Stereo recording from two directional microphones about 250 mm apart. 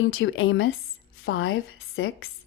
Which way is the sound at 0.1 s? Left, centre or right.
Left.